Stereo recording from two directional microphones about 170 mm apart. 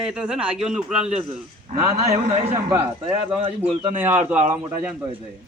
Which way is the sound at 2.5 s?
15° right (ahead or behind).